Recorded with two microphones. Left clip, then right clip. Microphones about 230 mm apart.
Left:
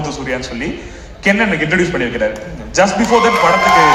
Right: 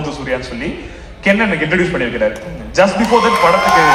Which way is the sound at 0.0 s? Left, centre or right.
Left.